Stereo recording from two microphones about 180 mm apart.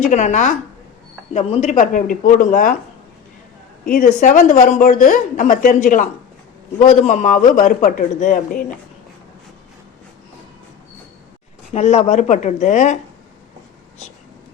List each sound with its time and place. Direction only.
0.0 s a woman's voice: 40° left (ahead or behind)
3.8 s a woman's voice: 50° left (ahead or behind)
11.7 s speech: 35° left (ahead or behind)